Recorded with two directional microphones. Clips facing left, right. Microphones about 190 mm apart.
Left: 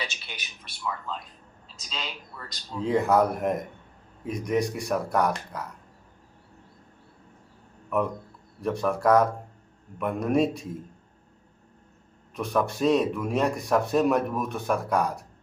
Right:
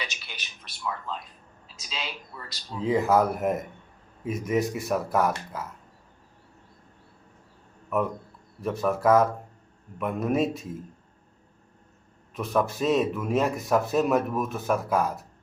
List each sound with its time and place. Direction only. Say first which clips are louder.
0.3 s a man's voice: left 2 dB; 20° left (ahead or behind)
0.6 s speech: even; centre (ahead or behind)
7.9 s speech: even; centre (ahead or behind)
12.4 s speech: left 1 dB; centre (ahead or behind)